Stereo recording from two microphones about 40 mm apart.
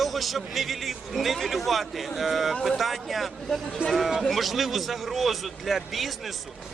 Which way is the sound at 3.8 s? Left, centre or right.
Right.